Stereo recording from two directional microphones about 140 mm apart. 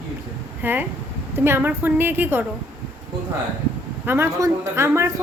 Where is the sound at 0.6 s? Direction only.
15° right (ahead or behind).